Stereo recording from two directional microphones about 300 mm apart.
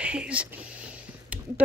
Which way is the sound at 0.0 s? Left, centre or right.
Centre.